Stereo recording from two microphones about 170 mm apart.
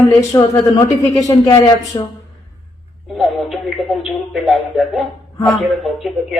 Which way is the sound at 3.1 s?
Centre (ahead or behind).